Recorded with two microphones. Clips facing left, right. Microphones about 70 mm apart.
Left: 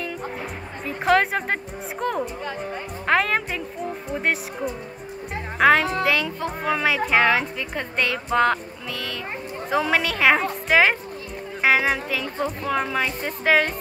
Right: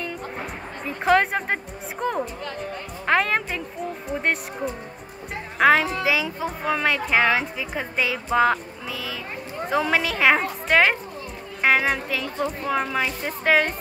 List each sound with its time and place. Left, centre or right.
0.8 s a woman's voice: centre
9.7 s a woman's voice: centre